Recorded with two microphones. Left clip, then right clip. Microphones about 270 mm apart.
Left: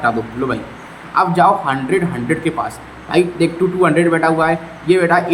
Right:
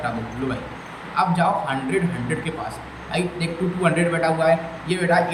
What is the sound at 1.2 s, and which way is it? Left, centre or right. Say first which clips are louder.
Speech: left 8 dB; centre.